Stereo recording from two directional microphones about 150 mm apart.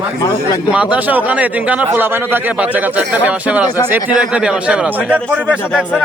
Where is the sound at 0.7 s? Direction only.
10° right (ahead or behind).